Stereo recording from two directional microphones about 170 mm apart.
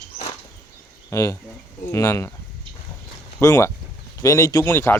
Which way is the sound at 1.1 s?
15° left (ahead or behind).